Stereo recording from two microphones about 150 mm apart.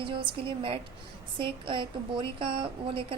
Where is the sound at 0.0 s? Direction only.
35° right (ahead or behind).